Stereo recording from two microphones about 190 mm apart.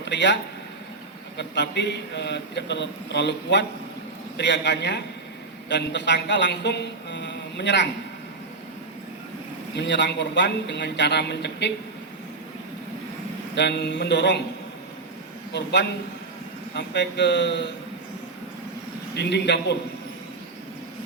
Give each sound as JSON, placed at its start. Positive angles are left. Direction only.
{"t": 0.0, "sound": "speech", "side_deg": 70}
{"t": 1.4, "sound": "a man's voice", "side_deg": 65}
{"t": 9.7, "sound": "a man's voice", "side_deg": 65}
{"t": 13.6, "sound": "a man's voice", "side_deg": 65}
{"t": 15.5, "sound": "a man's voice", "side_deg": 65}
{"t": 19.1, "sound": "a man's voice", "side_deg": 65}